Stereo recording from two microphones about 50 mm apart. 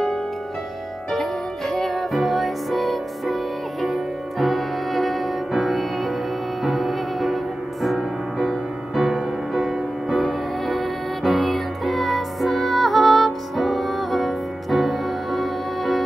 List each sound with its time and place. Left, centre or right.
1.1 s music: centre